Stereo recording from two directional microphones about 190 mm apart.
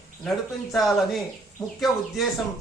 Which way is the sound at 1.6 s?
20° left (ahead or behind).